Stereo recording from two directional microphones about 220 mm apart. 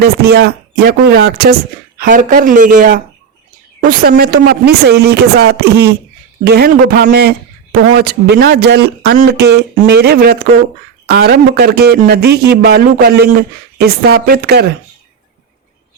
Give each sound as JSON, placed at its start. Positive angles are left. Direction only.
{"t": 0.0, "sound": "a man's voice", "side_deg": -45}